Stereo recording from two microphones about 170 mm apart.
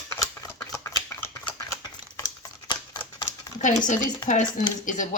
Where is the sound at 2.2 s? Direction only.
20° left (ahead or behind).